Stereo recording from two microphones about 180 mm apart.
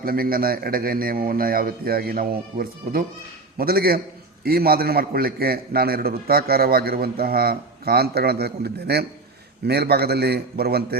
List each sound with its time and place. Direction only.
0.0 s a man's voice: 55° right (ahead or behind)